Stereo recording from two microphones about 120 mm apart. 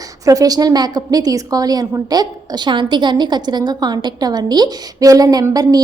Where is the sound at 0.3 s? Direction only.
30° right (ahead or behind).